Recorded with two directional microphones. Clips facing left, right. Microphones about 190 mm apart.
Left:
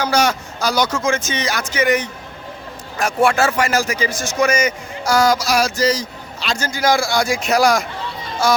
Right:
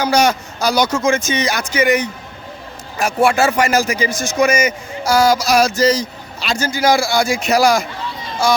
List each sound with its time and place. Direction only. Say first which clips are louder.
0.0 s a man's voice: right 3 dB; 15° right (ahead or behind)
5.4 s a sound: right 4 dB; 20° right (ahead or behind)
6.4 s a man's voice: right 3 dB; 5° right (ahead or behind)